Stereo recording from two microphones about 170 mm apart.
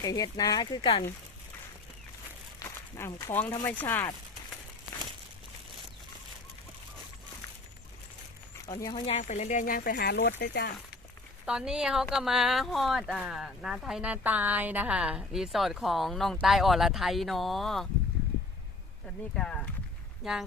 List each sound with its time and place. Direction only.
0.0 s speech: 20° left (ahead or behind)
2.6 s speech: 20° left (ahead or behind)
8.6 s speech: 20° left (ahead or behind)
9.1 s speech: 45° left (ahead or behind); by 10.7 s 75° left (ahead or behind)
11.4 s speech: 5° right (ahead or behind)
19.4 s speech: 5° left (ahead or behind)